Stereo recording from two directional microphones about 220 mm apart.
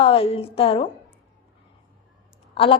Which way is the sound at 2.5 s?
25° left (ahead or behind).